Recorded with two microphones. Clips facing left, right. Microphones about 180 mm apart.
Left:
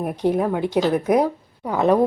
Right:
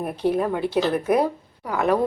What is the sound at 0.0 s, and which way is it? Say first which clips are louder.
A woman's voice: left 2 dB; 15° left (ahead or behind).